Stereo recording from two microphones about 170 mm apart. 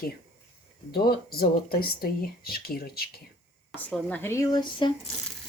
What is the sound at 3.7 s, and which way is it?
Speech, 10° left (ahead or behind).